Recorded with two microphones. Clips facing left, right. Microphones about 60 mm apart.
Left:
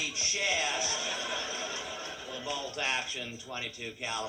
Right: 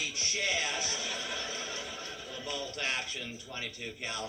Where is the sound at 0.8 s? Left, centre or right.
Left.